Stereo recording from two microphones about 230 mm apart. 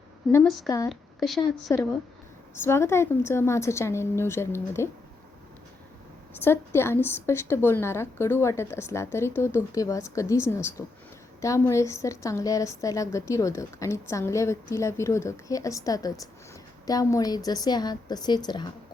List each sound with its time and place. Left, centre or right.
0.3 s a woman's voice: centre
1.7 s a woman's voice: centre
6.3 s a woman's voice: centre